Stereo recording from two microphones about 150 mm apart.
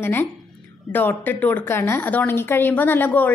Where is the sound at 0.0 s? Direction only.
15° left (ahead or behind).